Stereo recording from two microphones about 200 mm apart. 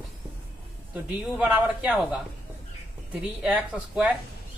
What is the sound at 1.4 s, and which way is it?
Speech, 5° right (ahead or behind).